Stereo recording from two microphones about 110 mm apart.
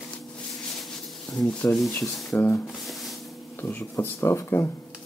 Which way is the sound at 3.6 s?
15° left (ahead or behind).